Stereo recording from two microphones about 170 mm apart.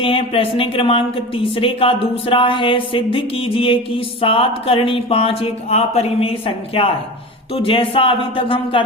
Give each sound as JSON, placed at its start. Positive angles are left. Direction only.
{"t": 0.0, "sound": "speech", "side_deg": 35}